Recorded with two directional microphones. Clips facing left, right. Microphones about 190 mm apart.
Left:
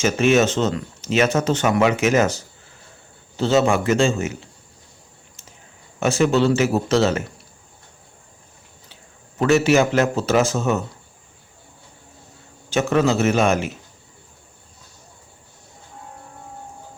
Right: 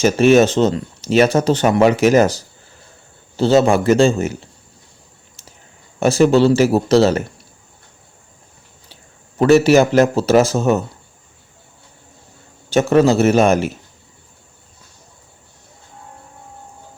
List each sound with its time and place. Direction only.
0.0 s speech: 35° right (ahead or behind)
6.0 s speech: 35° right (ahead or behind)
9.4 s speech: 35° right (ahead or behind)
12.7 s speech: 35° right (ahead or behind)